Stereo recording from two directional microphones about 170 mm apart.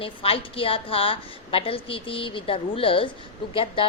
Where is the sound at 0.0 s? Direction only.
30° left (ahead or behind).